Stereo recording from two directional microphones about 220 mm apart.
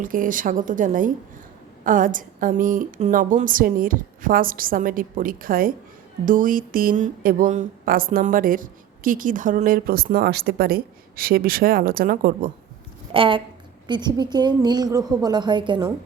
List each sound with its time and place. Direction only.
0.0 s speech: 40° right (ahead or behind)
13.1 s a woman's voice: 25° right (ahead or behind)